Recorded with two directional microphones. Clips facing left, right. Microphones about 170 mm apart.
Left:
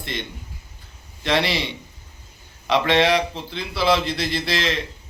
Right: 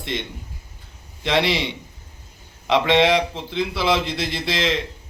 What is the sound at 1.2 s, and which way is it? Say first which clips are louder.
Speech: right 1 dB; 20° right (ahead or behind).